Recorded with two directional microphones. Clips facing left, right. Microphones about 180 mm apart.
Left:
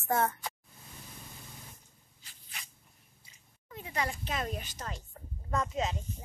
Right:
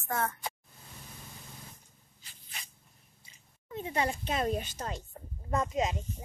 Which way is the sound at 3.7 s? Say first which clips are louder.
Right 4 dB; 25° right (ahead or behind).